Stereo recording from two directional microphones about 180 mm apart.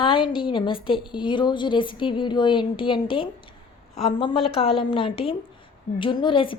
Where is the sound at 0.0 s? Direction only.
30° left (ahead or behind).